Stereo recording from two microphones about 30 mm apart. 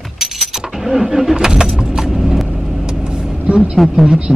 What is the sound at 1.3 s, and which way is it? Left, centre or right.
Vehicle, right.